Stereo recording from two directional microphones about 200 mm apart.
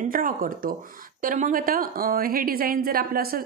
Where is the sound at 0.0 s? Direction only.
45° right (ahead or behind).